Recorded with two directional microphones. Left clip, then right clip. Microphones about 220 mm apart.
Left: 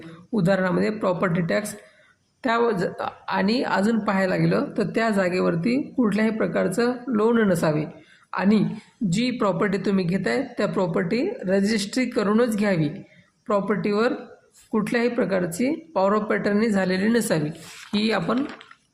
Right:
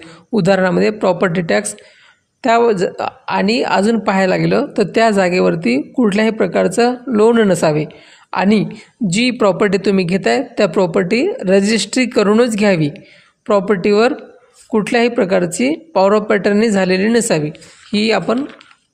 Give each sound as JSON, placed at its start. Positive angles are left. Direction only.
{"t": 0.3, "sound": "a woman's voice", "side_deg": -40}